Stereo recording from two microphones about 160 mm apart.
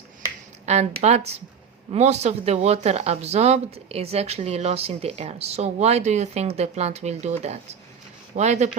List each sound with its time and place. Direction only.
0.6 s speech: 45° right (ahead or behind)